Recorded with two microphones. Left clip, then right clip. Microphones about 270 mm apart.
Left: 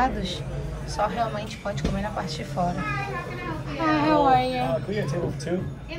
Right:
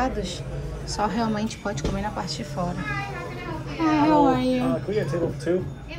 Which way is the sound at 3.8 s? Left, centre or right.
Centre.